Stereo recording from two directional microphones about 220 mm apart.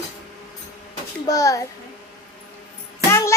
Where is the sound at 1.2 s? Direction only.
15° left (ahead or behind).